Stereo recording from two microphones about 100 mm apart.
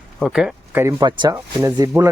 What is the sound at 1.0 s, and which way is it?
Speech, 40° right (ahead or behind).